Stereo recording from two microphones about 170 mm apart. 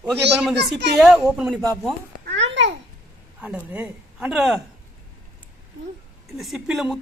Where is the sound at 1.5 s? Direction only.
20° right (ahead or behind).